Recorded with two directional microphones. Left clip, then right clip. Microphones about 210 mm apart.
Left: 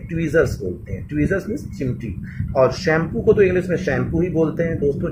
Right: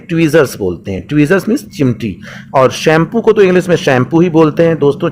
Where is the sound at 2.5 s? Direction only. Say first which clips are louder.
Right 8 dB; 40° right (ahead or behind).